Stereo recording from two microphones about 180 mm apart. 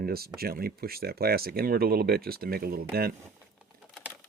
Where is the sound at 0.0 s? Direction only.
60° right (ahead or behind).